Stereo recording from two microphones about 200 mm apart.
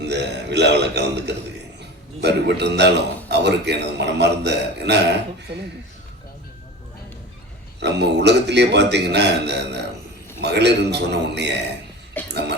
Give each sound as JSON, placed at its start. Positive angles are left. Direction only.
{"t": 0.0, "sound": "a man's voice", "side_deg": -60}
{"t": 7.8, "sound": "a man's voice", "side_deg": -55}